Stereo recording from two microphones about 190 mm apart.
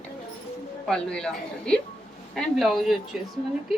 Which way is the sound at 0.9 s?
5° left (ahead or behind).